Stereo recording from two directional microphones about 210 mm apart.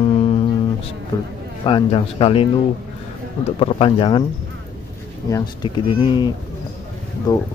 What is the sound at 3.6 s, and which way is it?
Speech, 25° left (ahead or behind).